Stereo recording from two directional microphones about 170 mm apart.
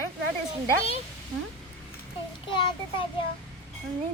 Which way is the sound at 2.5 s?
30° left (ahead or behind).